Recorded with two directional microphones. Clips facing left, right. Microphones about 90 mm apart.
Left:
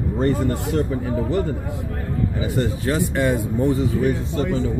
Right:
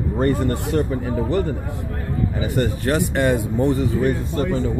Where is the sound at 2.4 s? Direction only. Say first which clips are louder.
Right 2 dB; 65° right (ahead or behind).